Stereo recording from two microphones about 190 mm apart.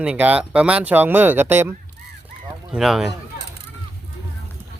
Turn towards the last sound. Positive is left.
turn(degrees=0)  # may be behind; listen again after turning